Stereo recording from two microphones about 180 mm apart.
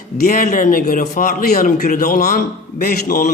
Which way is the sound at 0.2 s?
50° left (ahead or behind).